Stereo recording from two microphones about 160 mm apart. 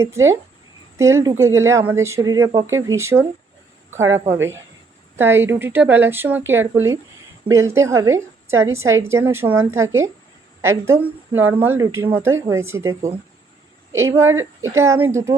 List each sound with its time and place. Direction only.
0.0 s a woman's voice: 15° right (ahead or behind)